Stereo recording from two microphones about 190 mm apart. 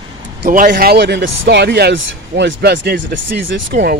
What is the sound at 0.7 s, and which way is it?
Speech, 60° right (ahead or behind).